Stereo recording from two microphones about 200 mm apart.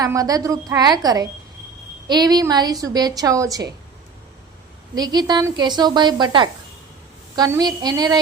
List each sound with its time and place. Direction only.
0.0 s a woman's voice: 15° right (ahead or behind)
4.9 s a woman's voice: 20° right (ahead or behind)